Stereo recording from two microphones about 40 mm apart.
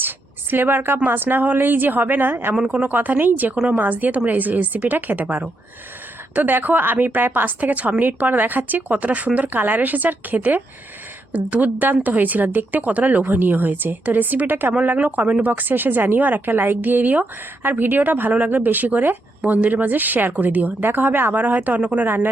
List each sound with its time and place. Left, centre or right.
0.5 s a woman's voice: right
2.7 s speech: right
9.5 s a woman's voice: right
14.7 s a woman's voice: right
21.3 s speech: right
22.0 s a woman's voice: right